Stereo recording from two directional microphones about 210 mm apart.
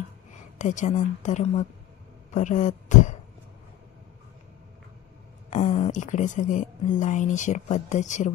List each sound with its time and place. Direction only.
0.6 s speech: 35° left (ahead or behind)
5.5 s speech: 30° left (ahead or behind)